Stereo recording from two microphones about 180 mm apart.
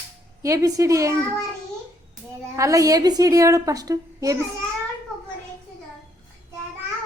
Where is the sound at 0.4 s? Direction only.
20° right (ahead or behind).